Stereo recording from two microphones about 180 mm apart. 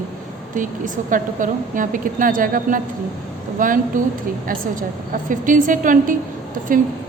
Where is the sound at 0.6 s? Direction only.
45° right (ahead or behind).